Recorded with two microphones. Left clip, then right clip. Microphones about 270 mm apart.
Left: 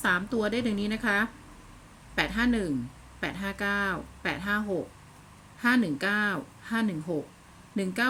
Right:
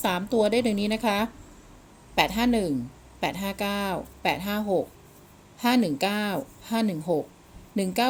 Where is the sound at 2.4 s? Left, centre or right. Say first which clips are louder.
Right 3 dB; centre.